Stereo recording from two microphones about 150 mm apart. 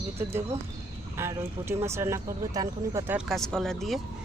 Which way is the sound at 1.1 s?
15° right (ahead or behind).